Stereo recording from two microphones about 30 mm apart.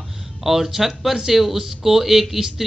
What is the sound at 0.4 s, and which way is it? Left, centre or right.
Speech, centre.